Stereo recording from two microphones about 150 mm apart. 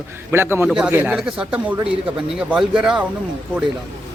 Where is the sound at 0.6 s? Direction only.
5° right (ahead or behind).